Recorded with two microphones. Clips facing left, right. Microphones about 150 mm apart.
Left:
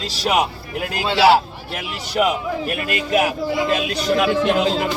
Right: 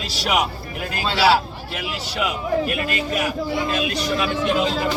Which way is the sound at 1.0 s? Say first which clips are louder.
Left 3 dB; 20° left (ahead or behind).